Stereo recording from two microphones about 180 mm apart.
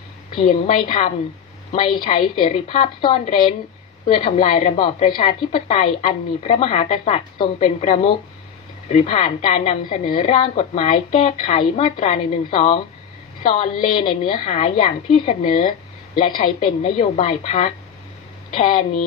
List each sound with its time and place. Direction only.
0.7 s a woman's voice: 30° left (ahead or behind)